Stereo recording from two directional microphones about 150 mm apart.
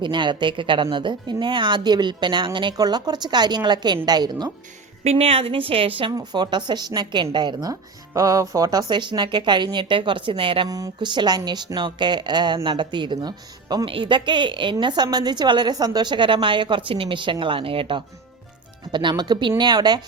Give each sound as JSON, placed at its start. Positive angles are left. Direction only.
{"t": 0.0, "sound": "a woman's voice", "side_deg": -30}
{"t": 5.0, "sound": "a woman's voice", "side_deg": -40}